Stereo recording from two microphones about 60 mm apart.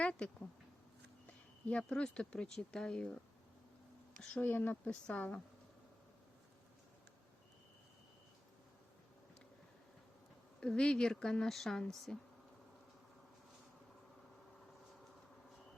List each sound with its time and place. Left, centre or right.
0.0 s speech: centre
1.9 s a woman's voice: centre
4.4 s speech: left
4.9 s speech: centre
10.6 s a woman's voice: centre